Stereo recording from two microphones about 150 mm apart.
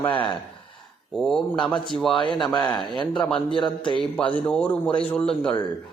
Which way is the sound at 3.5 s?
35° left (ahead or behind).